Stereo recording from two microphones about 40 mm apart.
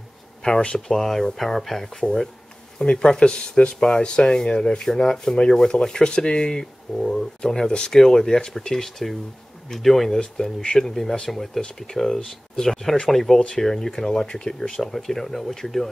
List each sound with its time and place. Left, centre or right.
0.7 s speech: centre
2.8 s speech: centre